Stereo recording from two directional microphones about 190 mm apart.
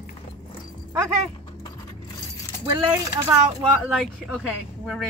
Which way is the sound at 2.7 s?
25° right (ahead or behind).